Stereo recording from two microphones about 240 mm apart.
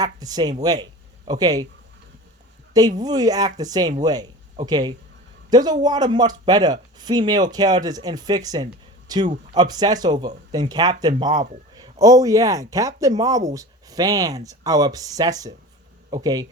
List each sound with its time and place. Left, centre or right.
0.0 s speech: centre
2.7 s speech: centre